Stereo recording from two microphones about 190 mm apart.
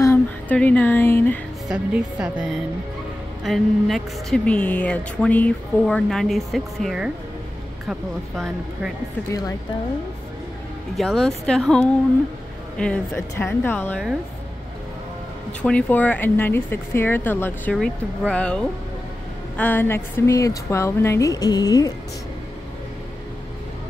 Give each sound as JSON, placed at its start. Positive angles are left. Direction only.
{"t": 0.0, "sound": "speech", "side_deg": 10}
{"t": 1.7, "sound": "a woman's voice", "side_deg": -5}
{"t": 11.0, "sound": "a woman's voice", "side_deg": 0}
{"t": 15.6, "sound": "a woman's voice", "side_deg": 5}